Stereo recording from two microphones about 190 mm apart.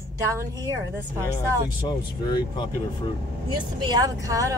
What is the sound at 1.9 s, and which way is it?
Speech, 20° left (ahead or behind).